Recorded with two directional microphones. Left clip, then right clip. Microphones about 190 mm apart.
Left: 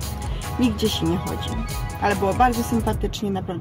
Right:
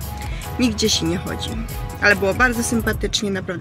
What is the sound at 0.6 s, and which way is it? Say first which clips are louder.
Speech: right 3 dB; centre (ahead or behind).